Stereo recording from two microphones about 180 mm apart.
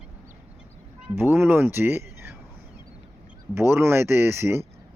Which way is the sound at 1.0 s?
10° right (ahead or behind).